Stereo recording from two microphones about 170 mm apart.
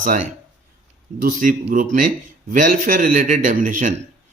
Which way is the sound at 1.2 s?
50° right (ahead or behind).